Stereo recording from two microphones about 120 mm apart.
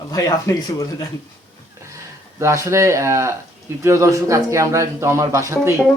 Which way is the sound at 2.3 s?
25° right (ahead or behind).